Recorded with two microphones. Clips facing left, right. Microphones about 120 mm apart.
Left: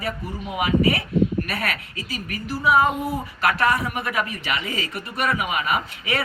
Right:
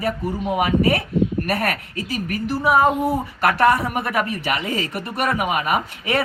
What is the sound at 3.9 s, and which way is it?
A woman's voice, 50° right (ahead or behind).